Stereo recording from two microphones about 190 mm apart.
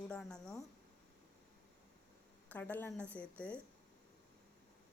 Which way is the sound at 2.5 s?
10° left (ahead or behind).